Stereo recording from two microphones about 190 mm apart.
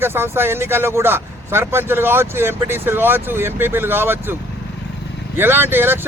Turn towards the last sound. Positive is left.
turn(degrees=-10)  # may be behind; listen again after turning